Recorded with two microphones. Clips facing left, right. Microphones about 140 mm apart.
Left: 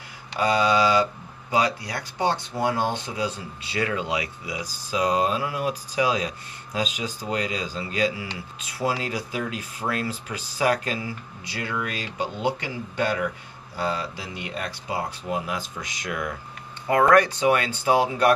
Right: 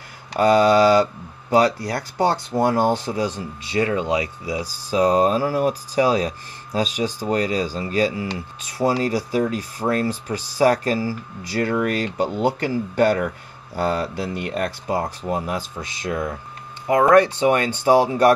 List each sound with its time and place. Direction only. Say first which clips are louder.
0.3 s speech: right 6 dB; 50° right (ahead or behind)
11.5 s speech: right 9 dB; 45° right (ahead or behind)